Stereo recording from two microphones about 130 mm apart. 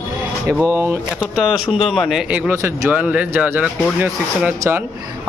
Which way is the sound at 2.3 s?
15° right (ahead or behind).